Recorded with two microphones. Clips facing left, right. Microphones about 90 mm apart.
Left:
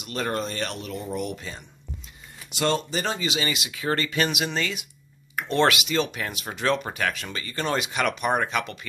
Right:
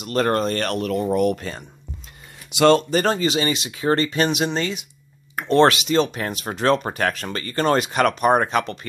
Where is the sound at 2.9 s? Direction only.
50° right (ahead or behind).